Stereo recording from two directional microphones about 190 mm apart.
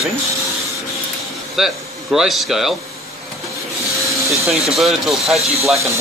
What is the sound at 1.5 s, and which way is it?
Speech, centre (ahead or behind).